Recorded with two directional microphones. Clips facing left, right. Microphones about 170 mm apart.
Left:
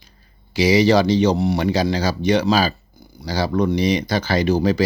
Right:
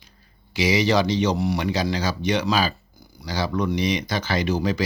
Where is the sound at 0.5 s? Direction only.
35° left (ahead or behind).